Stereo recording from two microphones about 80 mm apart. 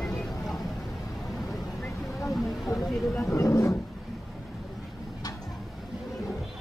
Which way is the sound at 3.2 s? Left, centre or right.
Left.